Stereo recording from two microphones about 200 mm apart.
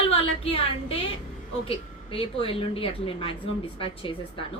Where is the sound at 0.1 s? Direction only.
30° left (ahead or behind).